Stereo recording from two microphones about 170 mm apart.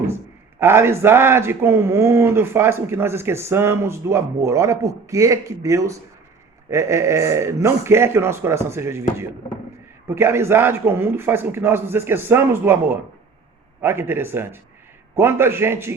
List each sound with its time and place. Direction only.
0.6 s speech: 15° right (ahead or behind)